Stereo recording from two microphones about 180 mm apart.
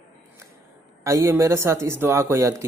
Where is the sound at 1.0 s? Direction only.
15° right (ahead or behind).